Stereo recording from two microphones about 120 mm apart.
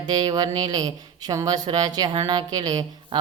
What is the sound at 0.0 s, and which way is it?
Speech, 35° right (ahead or behind).